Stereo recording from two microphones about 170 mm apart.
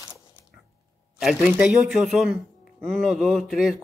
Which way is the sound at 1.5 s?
5° right (ahead or behind).